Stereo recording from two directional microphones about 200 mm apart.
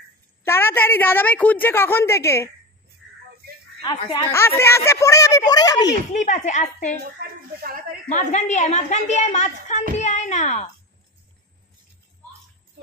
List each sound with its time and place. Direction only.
0.4 s a woman's voice: 10° left (ahead or behind)
3.8 s speech: 20° left (ahead or behind)
6.1 s a woman's voice: 40° left (ahead or behind)
7.0 s speech: 45° right (ahead or behind)
8.1 s a woman's voice: 35° left (ahead or behind)